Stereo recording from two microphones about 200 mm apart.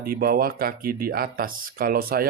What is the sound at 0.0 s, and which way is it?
Speech, 45° right (ahead or behind).